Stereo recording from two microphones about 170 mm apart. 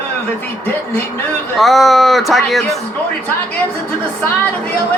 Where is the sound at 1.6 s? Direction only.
Centre (ahead or behind).